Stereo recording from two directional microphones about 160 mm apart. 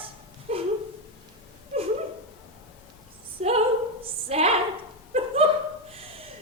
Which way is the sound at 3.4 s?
40° right (ahead or behind).